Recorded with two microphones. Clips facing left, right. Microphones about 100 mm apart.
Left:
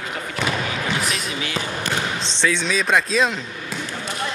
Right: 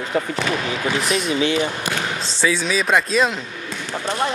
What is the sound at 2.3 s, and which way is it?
Speech, 5° right (ahead or behind).